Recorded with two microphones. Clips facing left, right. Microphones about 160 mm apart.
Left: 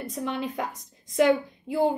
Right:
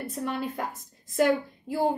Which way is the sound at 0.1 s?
Centre (ahead or behind).